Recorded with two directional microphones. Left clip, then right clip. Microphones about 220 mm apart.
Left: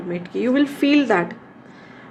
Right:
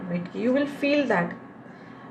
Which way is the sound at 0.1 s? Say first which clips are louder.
Left 4 dB; 50° left (ahead or behind).